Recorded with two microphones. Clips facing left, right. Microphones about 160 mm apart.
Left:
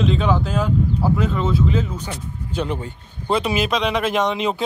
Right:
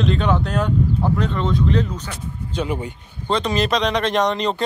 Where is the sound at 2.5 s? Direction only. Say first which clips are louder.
Even; 10° right (ahead or behind).